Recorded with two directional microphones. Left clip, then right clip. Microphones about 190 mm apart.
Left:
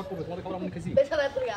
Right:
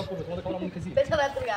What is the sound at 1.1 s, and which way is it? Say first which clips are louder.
Speech: right 1 dB; centre (ahead or behind).